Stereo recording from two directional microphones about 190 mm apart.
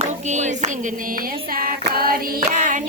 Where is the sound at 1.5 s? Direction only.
50° right (ahead or behind).